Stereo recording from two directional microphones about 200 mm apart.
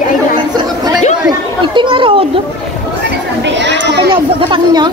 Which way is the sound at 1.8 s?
25° right (ahead or behind).